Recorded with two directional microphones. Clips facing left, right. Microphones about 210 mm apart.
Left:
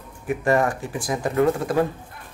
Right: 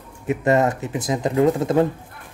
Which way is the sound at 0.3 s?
20° right (ahead or behind).